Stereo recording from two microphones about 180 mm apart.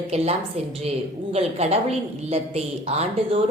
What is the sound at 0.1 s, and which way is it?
A woman's voice, 35° right (ahead or behind).